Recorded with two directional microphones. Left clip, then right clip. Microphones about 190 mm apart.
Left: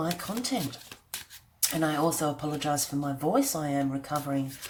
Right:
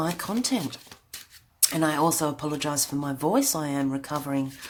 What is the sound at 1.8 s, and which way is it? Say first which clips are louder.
Speech: right 3 dB; 40° right (ahead or behind).